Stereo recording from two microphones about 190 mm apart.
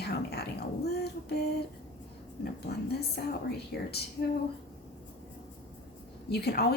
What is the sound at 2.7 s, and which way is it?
Speech, 60° left (ahead or behind).